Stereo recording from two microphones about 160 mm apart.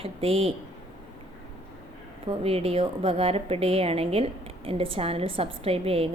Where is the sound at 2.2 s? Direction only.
35° right (ahead or behind).